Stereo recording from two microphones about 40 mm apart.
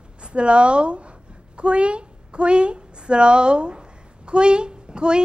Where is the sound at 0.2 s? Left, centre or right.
Right.